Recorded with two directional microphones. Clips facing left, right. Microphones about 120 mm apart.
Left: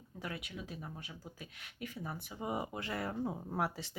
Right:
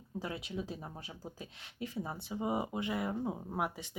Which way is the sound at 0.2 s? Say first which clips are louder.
Right 4 dB; 25° right (ahead or behind).